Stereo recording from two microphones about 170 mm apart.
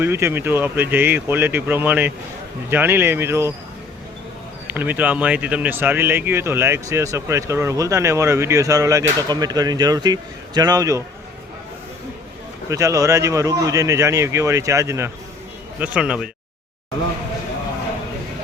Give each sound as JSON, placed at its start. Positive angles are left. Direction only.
{"t": 0.0, "sound": "speech", "side_deg": -15}
{"t": 4.6, "sound": "speech", "side_deg": -10}
{"t": 12.6, "sound": "speech", "side_deg": -20}
{"t": 15.8, "sound": "speech", "side_deg": -5}